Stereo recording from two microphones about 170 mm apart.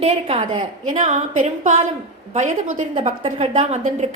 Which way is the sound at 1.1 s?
45° right (ahead or behind).